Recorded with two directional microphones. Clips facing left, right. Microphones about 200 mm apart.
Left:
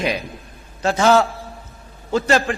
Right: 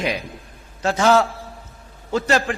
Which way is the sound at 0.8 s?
25° left (ahead or behind).